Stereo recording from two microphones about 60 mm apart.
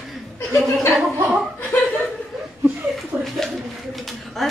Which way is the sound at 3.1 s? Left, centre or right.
Centre.